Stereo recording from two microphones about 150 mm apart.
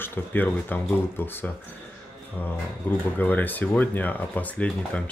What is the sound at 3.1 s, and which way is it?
Speech, 10° left (ahead or behind).